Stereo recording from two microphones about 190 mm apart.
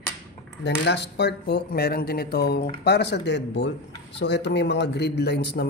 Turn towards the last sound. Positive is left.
turn(degrees=60)  # may be behind; listen again after turning